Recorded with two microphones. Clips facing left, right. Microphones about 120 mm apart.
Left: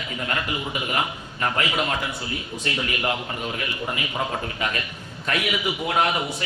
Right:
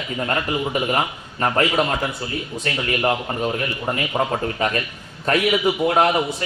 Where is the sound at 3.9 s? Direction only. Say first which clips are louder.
Right 7 dB; 40° right (ahead or behind).